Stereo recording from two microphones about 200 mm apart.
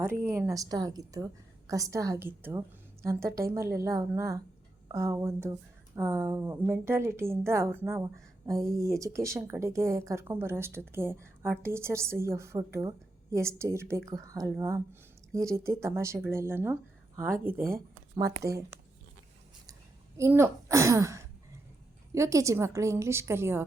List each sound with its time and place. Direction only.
0.0 s a woman's voice: 15° right (ahead or behind)
20.1 s a woman's voice: 15° right (ahead or behind)